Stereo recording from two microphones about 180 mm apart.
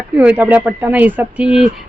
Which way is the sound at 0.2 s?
5° right (ahead or behind).